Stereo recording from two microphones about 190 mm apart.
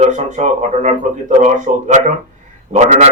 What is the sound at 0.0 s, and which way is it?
Speech, 40° right (ahead or behind).